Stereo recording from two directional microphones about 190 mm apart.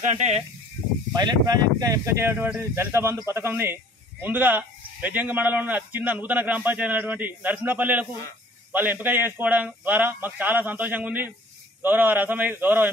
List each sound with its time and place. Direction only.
0.1 s speech: 40° right (ahead or behind)
1.1 s speech: 20° right (ahead or behind)